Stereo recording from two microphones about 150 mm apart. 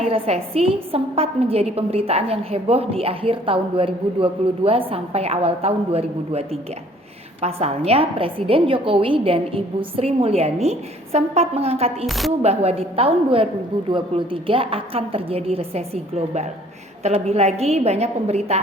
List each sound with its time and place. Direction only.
0.0 s a woman's voice: 40° right (ahead or behind)
12.0 s speech: centre (ahead or behind)
12.4 s a woman's voice: 45° right (ahead or behind)